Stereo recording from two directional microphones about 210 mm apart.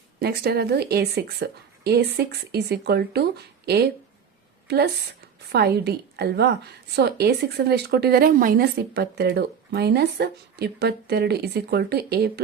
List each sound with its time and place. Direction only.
0.2 s a woman's voice: 50° right (ahead or behind)
4.7 s a woman's voice: 50° right (ahead or behind)